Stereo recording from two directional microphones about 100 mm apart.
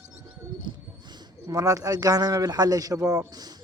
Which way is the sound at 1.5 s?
35° right (ahead or behind).